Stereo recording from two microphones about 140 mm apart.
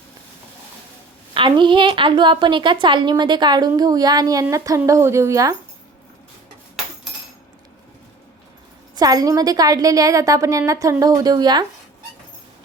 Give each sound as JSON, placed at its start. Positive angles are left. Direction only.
{"t": 1.3, "sound": "a woman's voice", "side_deg": -35}
{"t": 9.0, "sound": "a woman's voice", "side_deg": -25}